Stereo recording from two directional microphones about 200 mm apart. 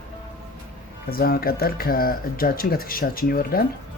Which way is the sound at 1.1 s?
50° left (ahead or behind).